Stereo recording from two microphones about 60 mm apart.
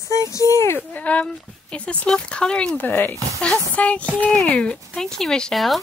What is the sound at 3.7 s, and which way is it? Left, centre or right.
Speech, left.